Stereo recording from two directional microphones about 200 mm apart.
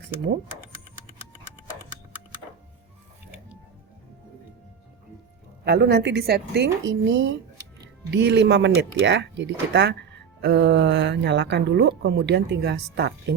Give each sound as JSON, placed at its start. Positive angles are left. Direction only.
{"t": 5.6, "sound": "speech", "side_deg": -55}